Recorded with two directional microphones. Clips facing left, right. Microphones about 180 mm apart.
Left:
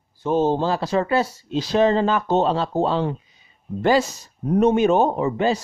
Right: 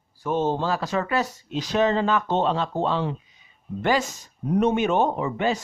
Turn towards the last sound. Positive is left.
turn(degrees=35)  # may be behind; listen again after turning